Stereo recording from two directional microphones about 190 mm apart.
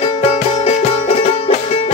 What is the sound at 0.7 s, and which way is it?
Music, 35° left (ahead or behind).